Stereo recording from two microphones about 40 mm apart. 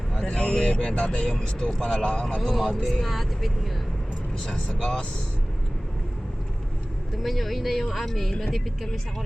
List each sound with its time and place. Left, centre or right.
0.2 s speech: left
1.3 s speech: left
2.6 s speech: centre
4.4 s speech: centre
4.8 s speech: left
7.2 s speech: centre